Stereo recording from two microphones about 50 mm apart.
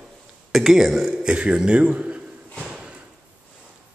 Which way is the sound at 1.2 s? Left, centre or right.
Centre.